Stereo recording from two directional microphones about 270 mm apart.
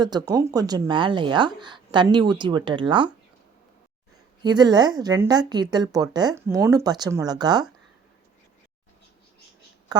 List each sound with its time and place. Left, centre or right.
0.0 s a woman's voice: centre
4.4 s a woman's voice: centre
9.9 s a woman's voice: centre